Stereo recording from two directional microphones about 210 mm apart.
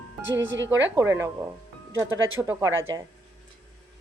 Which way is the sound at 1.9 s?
70° right (ahead or behind).